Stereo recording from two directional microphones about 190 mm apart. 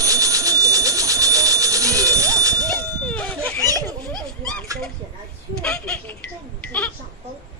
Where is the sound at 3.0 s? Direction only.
5° left (ahead or behind).